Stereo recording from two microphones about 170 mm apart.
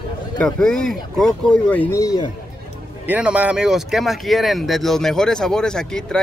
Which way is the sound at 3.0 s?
10° right (ahead or behind).